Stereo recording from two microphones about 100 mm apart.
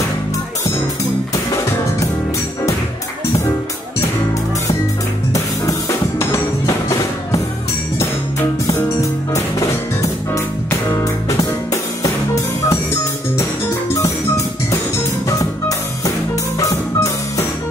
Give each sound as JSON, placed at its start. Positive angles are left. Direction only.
{"t": 5.3, "sound": "music", "side_deg": 30}
{"t": 8.7, "sound": "music", "side_deg": 25}
{"t": 11.2, "sound": "music", "side_deg": 35}